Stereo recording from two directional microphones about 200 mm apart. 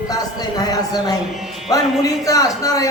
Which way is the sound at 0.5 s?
20° left (ahead or behind).